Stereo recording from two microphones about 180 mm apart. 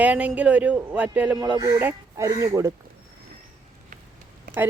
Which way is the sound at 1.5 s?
20° right (ahead or behind).